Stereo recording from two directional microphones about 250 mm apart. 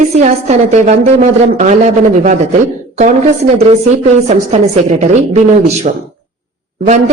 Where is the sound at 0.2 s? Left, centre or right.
Right.